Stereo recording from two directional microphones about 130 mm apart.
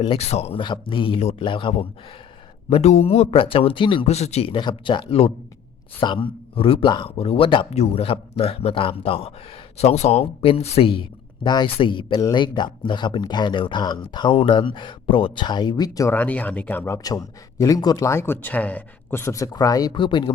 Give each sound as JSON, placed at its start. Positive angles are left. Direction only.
{"t": 0.0, "sound": "speech", "side_deg": 45}
{"t": 0.6, "sound": "speech", "side_deg": 40}
{"t": 1.5, "sound": "speech", "side_deg": 40}
{"t": 2.6, "sound": "speech", "side_deg": 55}
{"t": 4.1, "sound": "speech", "side_deg": 55}
{"t": 9.7, "sound": "speech", "side_deg": 55}
{"t": 16.1, "sound": "speech", "side_deg": 10}
{"t": 17.0, "sound": "speech", "side_deg": 30}